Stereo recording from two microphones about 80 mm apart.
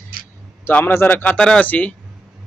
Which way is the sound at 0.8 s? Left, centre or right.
Left.